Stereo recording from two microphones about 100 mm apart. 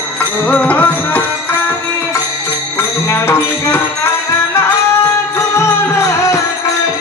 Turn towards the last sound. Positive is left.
turn(degrees=25)  # may be behind; listen again after turning